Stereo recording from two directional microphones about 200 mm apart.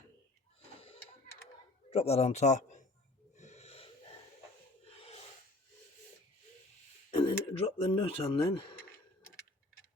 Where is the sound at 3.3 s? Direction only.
35° left (ahead or behind).